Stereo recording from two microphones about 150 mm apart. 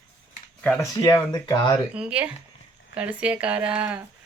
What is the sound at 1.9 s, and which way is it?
Speech, 5° right (ahead or behind).